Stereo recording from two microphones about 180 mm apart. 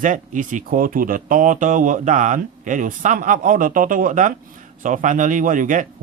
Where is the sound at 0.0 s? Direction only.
45° right (ahead or behind).